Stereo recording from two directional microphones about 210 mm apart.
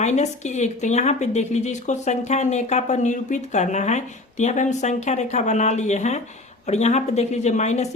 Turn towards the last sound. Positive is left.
turn(degrees=35)  # may be behind; listen again after turning